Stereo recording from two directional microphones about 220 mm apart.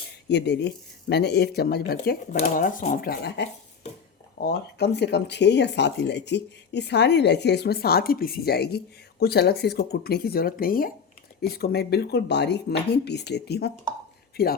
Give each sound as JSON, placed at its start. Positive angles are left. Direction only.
{"t": 0.3, "sound": "speech", "side_deg": 50}